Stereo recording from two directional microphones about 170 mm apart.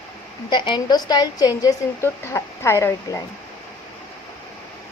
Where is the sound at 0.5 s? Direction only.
25° left (ahead or behind).